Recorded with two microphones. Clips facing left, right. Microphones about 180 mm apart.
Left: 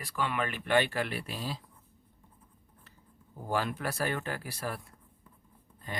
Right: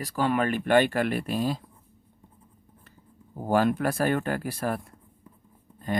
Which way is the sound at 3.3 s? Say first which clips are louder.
Right 9 dB; 50° right (ahead or behind).